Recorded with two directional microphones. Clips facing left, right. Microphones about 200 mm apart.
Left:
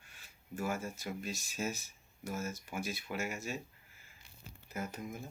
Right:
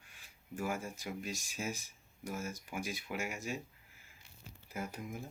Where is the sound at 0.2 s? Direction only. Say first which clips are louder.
Left 1 dB; 15° right (ahead or behind).